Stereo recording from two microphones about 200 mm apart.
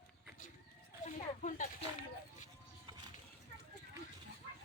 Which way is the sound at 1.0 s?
35° left (ahead or behind).